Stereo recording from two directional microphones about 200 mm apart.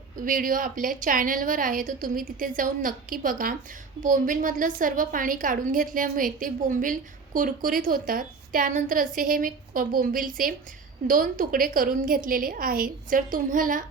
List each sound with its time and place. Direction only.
0.3 s a woman's voice: 45° right (ahead or behind)